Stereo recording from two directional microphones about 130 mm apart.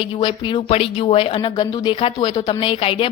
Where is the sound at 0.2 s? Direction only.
35° left (ahead or behind).